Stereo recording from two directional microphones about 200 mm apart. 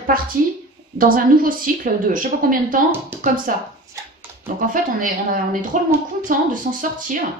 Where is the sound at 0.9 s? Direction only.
45° right (ahead or behind).